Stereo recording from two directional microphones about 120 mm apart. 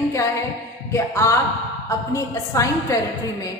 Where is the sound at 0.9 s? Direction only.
25° left (ahead or behind).